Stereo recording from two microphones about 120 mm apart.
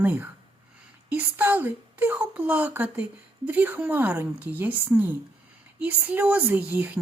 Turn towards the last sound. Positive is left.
turn(degrees=-15)  # may be behind; listen again after turning